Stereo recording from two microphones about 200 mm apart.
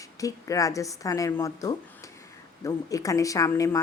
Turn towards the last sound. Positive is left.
turn(degrees=15)  # may be behind; listen again after turning